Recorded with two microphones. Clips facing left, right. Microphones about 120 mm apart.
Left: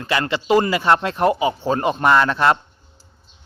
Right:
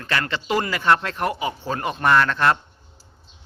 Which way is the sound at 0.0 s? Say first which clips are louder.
Left 4 dB; 15° left (ahead or behind).